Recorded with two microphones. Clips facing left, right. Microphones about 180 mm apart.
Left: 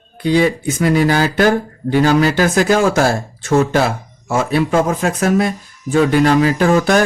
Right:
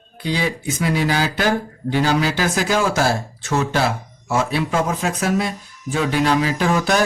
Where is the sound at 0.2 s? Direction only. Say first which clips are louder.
Left 8 dB; 50° left (ahead or behind).